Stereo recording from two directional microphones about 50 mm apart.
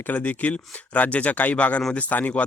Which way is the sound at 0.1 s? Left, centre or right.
Left.